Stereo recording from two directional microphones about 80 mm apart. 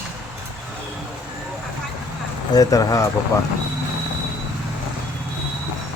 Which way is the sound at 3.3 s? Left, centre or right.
Left.